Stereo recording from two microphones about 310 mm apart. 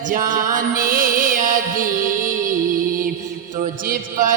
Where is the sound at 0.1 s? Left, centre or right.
Right.